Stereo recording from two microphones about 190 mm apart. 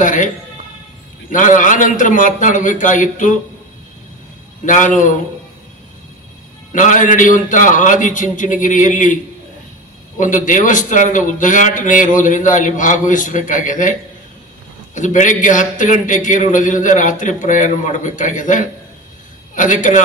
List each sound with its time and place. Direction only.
0.0 s speech: 40° left (ahead or behind)
1.3 s a man's voice: 45° left (ahead or behind)
4.6 s a man's voice: 40° left (ahead or behind)
6.7 s a man's voice: 40° left (ahead or behind)
15.0 s a man's voice: 40° left (ahead or behind)